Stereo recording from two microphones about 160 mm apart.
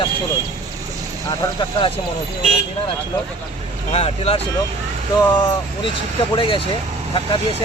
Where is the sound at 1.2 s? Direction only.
30° left (ahead or behind).